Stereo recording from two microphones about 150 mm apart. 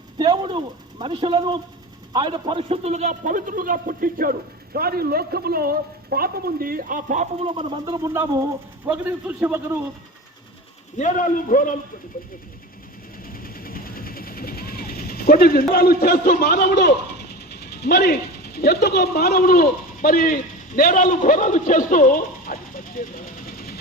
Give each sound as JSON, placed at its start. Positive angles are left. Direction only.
{"t": 0.2, "sound": "a man's voice", "side_deg": -30}
{"t": 7.4, "sound": "speech", "side_deg": -35}
{"t": 8.0, "sound": "a man's voice", "side_deg": -15}
{"t": 10.9, "sound": "a man's voice", "side_deg": 55}
{"t": 13.2, "sound": "vehicle", "side_deg": 75}
{"t": 17.2, "sound": "speech", "side_deg": 90}